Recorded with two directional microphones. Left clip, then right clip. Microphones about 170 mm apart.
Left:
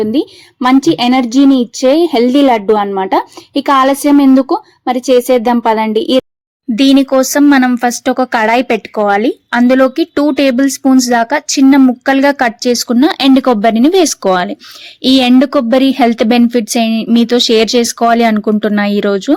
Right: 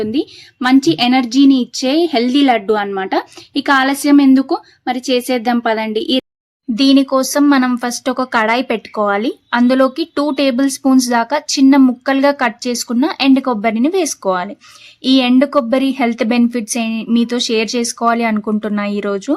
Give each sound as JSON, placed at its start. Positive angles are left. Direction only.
{"t": 0.0, "sound": "a woman's voice", "side_deg": 10}
{"t": 6.7, "sound": "speech", "side_deg": 25}